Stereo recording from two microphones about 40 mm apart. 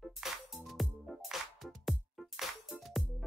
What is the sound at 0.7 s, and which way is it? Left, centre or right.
Music, centre.